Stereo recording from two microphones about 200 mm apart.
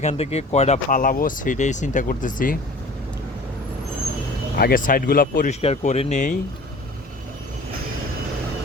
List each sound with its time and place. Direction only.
0.0 s speech: 35° left (ahead or behind)
4.5 s speech: 45° left (ahead or behind)
5.6 s speech: 30° left (ahead or behind)